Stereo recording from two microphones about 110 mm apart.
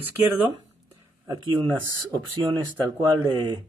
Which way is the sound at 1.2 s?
40° right (ahead or behind).